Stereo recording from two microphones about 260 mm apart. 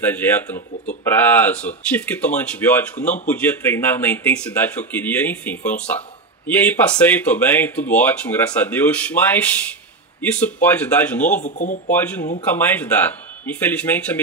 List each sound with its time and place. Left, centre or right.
0.0 s speech: centre
11.4 s speech: left
11.9 s speech: centre